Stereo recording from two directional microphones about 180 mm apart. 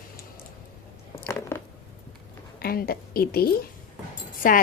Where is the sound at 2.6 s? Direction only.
55° left (ahead or behind).